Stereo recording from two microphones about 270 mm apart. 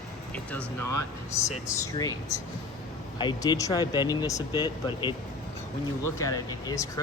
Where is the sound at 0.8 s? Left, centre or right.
Left.